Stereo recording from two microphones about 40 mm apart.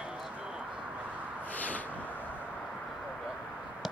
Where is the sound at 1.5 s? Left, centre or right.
Left.